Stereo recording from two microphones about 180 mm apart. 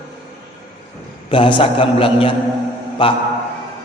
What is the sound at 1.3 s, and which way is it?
A man's voice, 30° left (ahead or behind).